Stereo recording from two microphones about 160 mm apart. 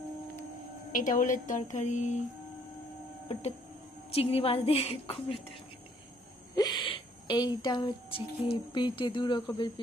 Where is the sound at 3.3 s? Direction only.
40° left (ahead or behind).